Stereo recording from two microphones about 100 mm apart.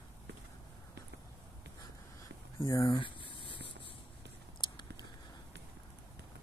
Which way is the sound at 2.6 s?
40° left (ahead or behind).